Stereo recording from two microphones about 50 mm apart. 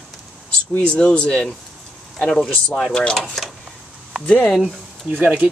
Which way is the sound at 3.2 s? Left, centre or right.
Centre.